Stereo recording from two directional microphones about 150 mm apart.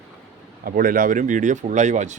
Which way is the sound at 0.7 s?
70° right (ahead or behind).